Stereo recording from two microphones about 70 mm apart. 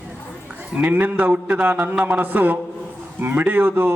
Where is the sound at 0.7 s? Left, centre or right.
Right.